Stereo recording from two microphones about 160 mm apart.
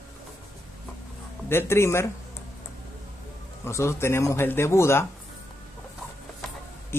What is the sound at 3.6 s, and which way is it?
Speech, 15° left (ahead or behind).